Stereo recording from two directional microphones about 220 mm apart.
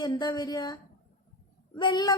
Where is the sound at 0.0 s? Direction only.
20° left (ahead or behind).